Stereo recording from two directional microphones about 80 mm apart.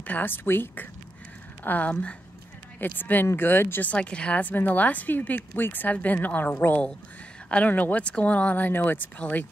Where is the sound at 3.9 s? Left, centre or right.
Centre.